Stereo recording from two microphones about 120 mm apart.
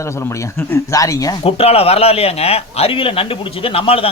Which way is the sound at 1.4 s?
55° left (ahead or behind).